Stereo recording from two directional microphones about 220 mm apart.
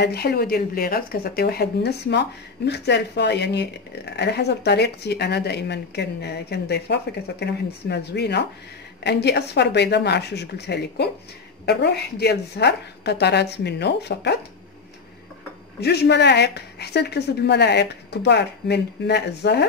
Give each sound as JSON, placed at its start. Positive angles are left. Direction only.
{"t": 0.0, "sound": "speech", "side_deg": 45}
{"t": 15.8, "sound": "speech", "side_deg": 50}